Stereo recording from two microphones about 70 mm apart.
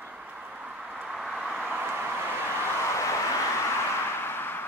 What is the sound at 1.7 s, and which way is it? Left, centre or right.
Vehicle, right.